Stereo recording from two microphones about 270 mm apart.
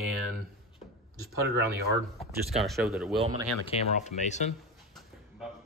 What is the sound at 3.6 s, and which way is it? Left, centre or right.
Speech, left.